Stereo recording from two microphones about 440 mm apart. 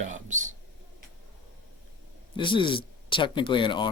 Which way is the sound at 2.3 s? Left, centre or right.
Centre.